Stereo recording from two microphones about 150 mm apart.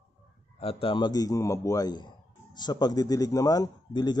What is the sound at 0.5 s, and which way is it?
Speech, 40° left (ahead or behind).